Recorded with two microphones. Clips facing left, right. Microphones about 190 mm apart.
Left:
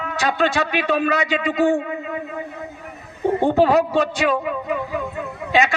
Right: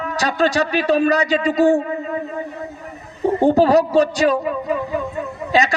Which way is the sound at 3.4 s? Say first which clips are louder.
Right 3 dB; 40° right (ahead or behind).